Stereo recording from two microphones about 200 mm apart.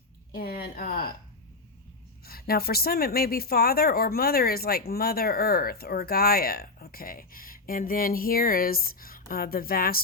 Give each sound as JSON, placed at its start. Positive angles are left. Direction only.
{"t": 0.3, "sound": "a woman's voice", "side_deg": 45}
{"t": 2.2, "sound": "a woman's voice", "side_deg": 50}